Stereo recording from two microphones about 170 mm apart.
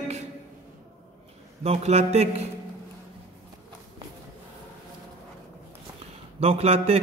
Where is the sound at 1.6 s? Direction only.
40° right (ahead or behind).